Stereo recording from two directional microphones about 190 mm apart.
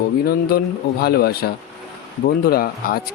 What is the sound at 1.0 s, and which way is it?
Speech, 55° left (ahead or behind).